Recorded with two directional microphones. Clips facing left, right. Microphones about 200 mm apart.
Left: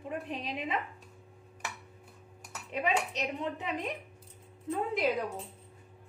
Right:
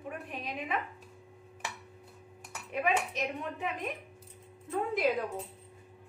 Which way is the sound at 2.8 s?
20° left (ahead or behind).